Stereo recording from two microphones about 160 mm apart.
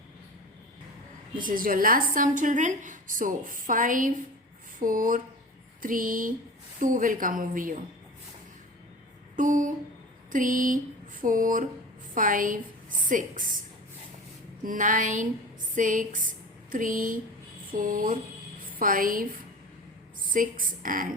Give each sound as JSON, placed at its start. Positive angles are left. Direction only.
{"t": 1.4, "sound": "a woman's voice", "side_deg": -60}
{"t": 9.3, "sound": "a sound", "side_deg": -55}
{"t": 10.3, "sound": "a woman's voice", "side_deg": -55}
{"t": 14.6, "sound": "a woman's voice", "side_deg": -55}